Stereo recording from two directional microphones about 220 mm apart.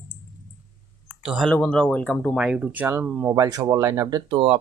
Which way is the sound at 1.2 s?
Centre (ahead or behind).